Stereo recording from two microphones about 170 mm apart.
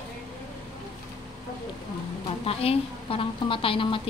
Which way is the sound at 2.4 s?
35° left (ahead or behind).